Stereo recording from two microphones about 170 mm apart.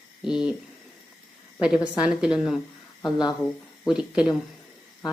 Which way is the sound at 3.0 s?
25° left (ahead or behind).